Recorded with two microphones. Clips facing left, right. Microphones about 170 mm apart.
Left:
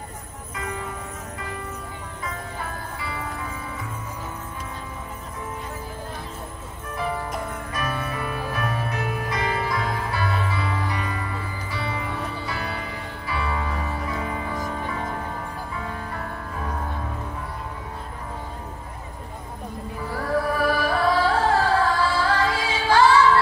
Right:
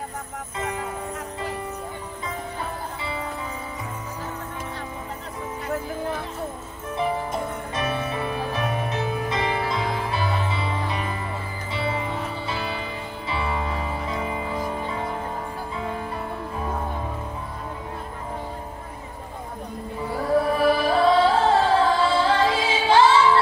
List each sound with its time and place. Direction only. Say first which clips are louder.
7.3 s music: right 2 dB; 25° right (ahead or behind)
20.1 s music: right 3 dB; 25° right (ahead or behind)